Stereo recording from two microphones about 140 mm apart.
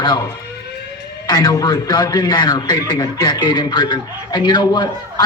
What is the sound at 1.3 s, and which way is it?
A man's voice, 30° left (ahead or behind).